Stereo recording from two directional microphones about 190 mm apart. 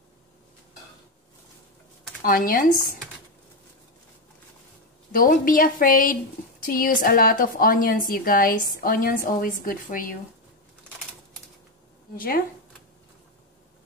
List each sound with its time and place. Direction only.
2.2 s a woman's voice: 50° left (ahead or behind)
5.1 s a woman's voice: 50° left (ahead or behind)